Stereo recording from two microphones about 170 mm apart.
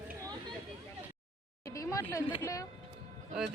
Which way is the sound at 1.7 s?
20° left (ahead or behind).